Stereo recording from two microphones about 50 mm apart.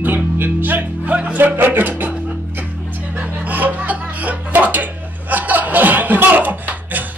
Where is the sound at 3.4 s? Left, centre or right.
Right.